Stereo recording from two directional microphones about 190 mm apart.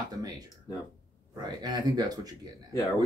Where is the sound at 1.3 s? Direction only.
20° right (ahead or behind).